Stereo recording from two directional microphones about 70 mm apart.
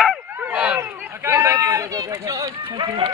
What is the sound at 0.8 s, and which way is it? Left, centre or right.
Run, right.